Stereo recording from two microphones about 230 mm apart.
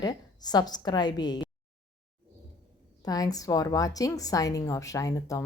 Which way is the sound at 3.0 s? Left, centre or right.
Centre.